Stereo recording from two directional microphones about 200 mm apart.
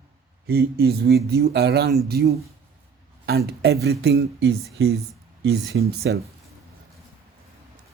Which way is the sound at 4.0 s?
65° right (ahead or behind).